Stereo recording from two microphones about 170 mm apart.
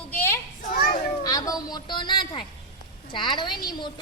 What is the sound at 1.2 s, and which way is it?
Speech, 20° left (ahead or behind).